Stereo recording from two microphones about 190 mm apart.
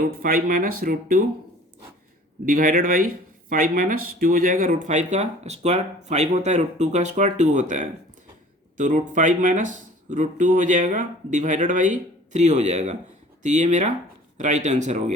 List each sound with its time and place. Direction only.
0.2 s speech: 50° right (ahead or behind)
2.5 s speech: 45° right (ahead or behind)